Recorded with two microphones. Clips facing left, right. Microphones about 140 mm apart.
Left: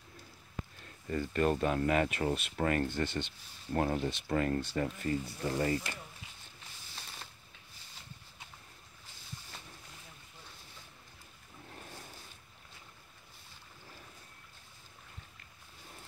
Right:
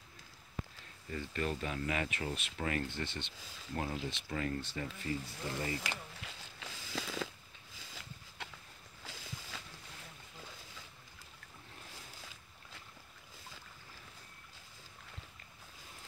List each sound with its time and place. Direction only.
1.1 s speech: 45° left (ahead or behind)
5.8 s a sound: 90° right
9.0 s boat: 90° right